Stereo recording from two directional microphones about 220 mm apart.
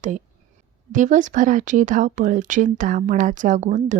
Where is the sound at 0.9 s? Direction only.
35° right (ahead or behind).